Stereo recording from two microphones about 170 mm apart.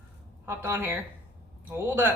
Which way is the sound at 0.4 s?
15° right (ahead or behind).